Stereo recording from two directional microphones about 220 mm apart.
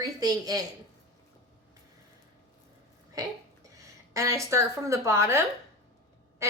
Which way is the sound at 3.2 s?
15° right (ahead or behind).